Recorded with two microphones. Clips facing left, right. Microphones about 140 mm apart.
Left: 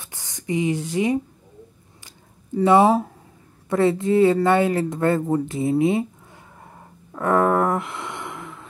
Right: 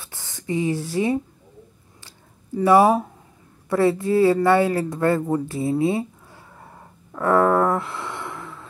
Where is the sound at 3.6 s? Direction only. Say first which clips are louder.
Even; 20° left (ahead or behind).